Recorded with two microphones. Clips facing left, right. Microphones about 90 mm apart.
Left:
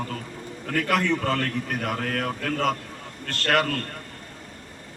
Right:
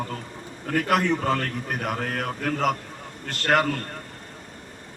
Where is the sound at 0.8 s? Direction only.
15° right (ahead or behind).